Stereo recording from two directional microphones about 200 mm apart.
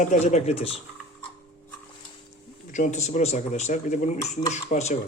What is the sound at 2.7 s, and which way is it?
Speech, 35° left (ahead or behind).